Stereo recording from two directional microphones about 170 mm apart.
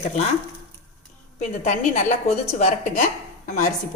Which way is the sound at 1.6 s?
45° left (ahead or behind).